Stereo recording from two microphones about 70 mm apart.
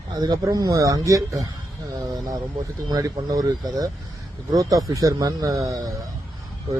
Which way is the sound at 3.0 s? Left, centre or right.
Right.